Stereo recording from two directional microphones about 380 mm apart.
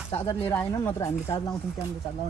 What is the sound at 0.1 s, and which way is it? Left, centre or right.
Speech, centre.